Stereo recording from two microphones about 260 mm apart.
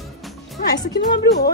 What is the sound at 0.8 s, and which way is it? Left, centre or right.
Speech, left.